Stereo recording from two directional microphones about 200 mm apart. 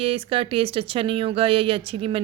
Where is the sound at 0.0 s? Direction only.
25° right (ahead or behind).